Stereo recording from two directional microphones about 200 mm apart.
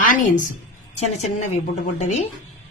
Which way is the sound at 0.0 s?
40° left (ahead or behind).